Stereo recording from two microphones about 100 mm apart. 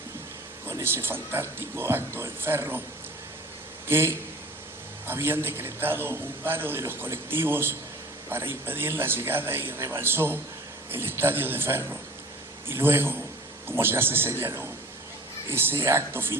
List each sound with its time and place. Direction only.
0.7 s a man's voice: 25° right (ahead or behind)
3.8 s a man's voice: 25° right (ahead or behind)